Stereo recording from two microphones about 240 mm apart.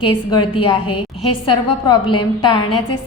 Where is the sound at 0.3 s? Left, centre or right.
Centre.